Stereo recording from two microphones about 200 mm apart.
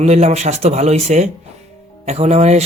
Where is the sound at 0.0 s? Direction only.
35° right (ahead or behind).